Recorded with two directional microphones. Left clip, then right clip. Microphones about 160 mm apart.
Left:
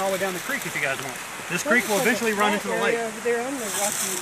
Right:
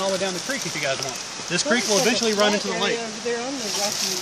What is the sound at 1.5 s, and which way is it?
Speech, 70° right (ahead or behind).